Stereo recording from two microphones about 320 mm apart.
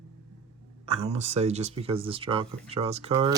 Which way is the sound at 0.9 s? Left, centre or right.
Centre.